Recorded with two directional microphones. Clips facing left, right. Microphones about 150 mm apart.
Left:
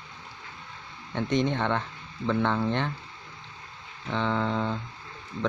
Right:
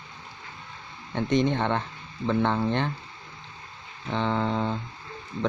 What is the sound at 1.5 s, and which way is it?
Speech, 30° right (ahead or behind).